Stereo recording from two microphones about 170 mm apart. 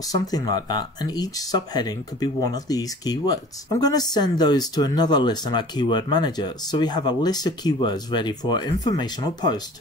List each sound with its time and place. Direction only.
0.1 s speech: 25° left (ahead or behind)